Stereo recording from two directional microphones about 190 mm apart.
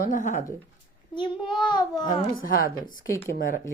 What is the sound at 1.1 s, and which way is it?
Speech, 25° left (ahead or behind).